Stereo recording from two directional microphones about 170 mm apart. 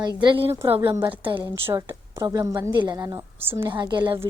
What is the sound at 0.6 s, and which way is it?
A woman's voice, 15° right (ahead or behind).